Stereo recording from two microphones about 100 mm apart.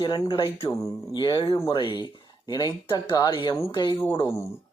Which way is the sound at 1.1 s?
50° left (ahead or behind).